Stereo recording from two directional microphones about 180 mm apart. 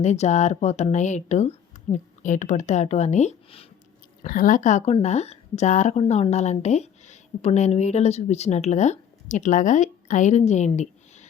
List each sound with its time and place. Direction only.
0.0 s speech: 40° left (ahead or behind)
4.2 s a woman's voice: 50° left (ahead or behind)